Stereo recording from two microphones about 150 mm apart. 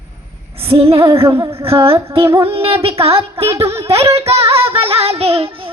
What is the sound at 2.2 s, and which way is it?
Music, 15° right (ahead or behind).